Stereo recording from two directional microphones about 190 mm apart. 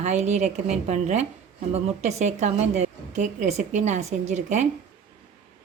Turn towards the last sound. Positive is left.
turn(degrees=-40)  # may be behind; listen again after turning